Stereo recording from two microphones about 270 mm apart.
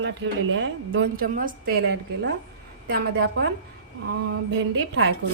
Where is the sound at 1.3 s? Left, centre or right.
Right.